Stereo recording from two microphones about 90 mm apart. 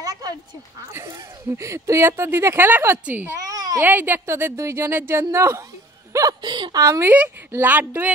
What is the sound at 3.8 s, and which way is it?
Speech, 20° right (ahead or behind).